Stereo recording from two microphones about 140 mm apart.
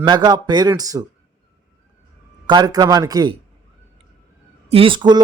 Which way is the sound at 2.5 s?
30° right (ahead or behind).